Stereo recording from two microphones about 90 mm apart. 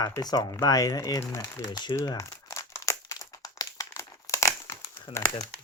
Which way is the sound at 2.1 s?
35° left (ahead or behind).